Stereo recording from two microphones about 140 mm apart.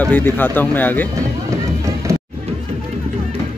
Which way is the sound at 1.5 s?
20° right (ahead or behind).